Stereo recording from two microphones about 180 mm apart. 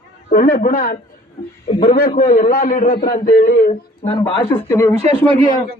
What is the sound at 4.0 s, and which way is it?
Speech, 30° left (ahead or behind).